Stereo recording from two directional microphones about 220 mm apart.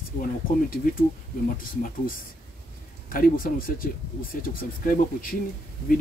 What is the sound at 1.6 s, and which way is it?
Speech, 40° left (ahead or behind).